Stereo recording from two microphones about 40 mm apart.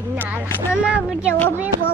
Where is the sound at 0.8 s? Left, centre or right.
Right.